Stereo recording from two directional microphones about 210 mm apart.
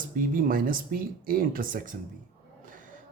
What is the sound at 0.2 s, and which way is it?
Speech, 40° right (ahead or behind).